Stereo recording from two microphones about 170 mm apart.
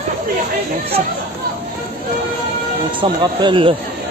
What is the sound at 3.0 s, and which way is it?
Speech, 30° right (ahead or behind).